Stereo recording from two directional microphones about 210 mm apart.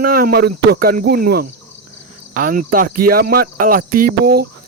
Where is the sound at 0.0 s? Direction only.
45° right (ahead or behind).